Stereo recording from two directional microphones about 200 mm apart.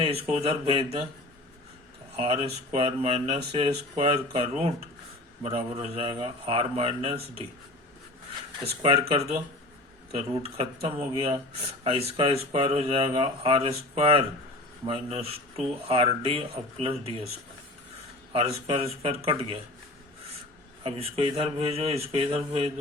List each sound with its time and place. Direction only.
0.0 s speech: 30° right (ahead or behind)
2.1 s speech: 30° right (ahead or behind)
8.6 s speech: 30° right (ahead or behind)
10.8 s speech: 30° right (ahead or behind)
18.3 s speech: 30° right (ahead or behind)
20.8 s speech: 30° right (ahead or behind)